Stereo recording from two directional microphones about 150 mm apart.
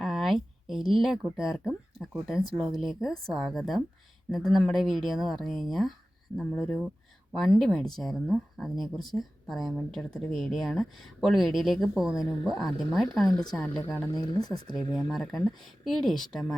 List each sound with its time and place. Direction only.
0.0 s speech: centre (ahead or behind)
7.6 s speech: centre (ahead or behind)
13.9 s speech: 15° left (ahead or behind)
14.2 s speech: 25° left (ahead or behind)
14.9 s speech: centre (ahead or behind)